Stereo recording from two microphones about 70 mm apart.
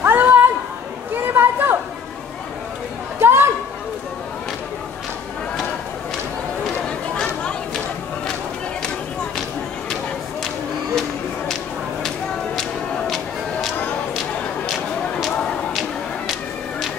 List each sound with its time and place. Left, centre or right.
0.0 s a sound: right
1.1 s chatter: right
3.2 s chatter: right
12.5 s music: centre